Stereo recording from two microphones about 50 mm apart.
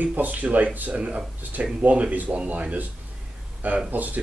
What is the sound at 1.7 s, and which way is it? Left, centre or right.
Speech, right.